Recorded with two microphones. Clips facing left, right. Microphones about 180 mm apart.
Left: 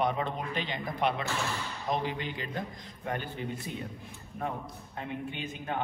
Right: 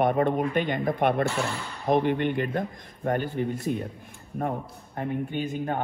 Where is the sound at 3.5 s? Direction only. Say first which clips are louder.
Right 9 dB; 40° right (ahead or behind).